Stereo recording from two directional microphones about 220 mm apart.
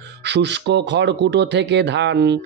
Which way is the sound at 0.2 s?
50° right (ahead or behind).